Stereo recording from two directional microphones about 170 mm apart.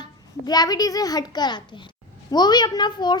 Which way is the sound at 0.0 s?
25° left (ahead or behind).